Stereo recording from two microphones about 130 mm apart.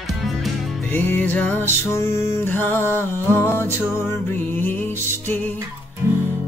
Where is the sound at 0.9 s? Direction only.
15° left (ahead or behind).